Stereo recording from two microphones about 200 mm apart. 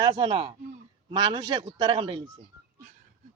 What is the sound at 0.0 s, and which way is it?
Speech, 25° right (ahead or behind).